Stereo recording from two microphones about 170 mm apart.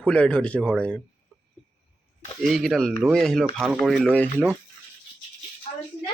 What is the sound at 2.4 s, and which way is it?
Speech, centre (ahead or behind).